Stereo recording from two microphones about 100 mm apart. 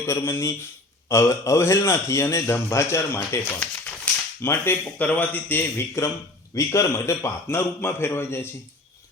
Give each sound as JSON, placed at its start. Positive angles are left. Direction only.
{"t": 0.0, "sound": "a man's voice", "side_deg": 25}